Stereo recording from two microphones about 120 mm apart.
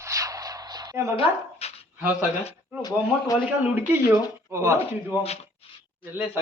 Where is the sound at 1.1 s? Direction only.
60° left (ahead or behind).